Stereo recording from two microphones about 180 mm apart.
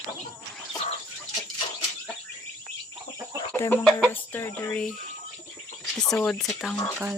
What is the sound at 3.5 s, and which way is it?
Chicken, 10° left (ahead or behind).